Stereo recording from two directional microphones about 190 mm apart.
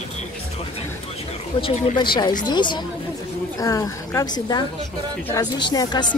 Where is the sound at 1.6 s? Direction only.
25° left (ahead or behind).